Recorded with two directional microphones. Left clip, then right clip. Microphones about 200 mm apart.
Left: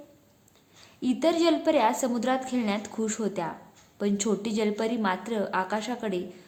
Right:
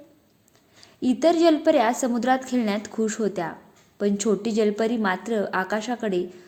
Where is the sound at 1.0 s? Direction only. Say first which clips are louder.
Right 5 dB; 15° right (ahead or behind).